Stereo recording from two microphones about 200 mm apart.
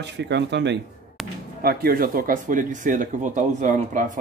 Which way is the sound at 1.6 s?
50° right (ahead or behind).